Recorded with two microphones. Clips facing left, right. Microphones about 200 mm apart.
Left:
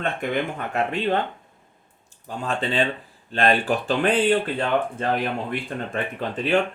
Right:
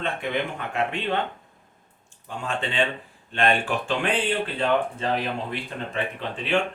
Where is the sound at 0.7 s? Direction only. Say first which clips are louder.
Left 4 dB; 40° left (ahead or behind).